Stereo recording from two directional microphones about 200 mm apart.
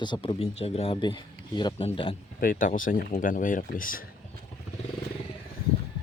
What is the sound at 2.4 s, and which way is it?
Speech, 45° left (ahead or behind).